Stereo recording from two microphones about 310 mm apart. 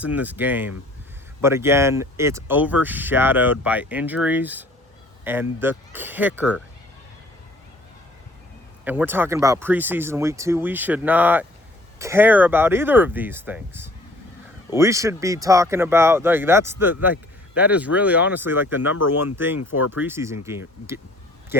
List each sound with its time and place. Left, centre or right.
0.0 s speech: centre
8.8 s speech: centre
19.5 s speech: left
19.9 s speech: centre